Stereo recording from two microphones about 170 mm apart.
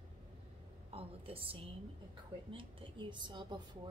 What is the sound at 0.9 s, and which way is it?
A woman's voice, 35° right (ahead or behind).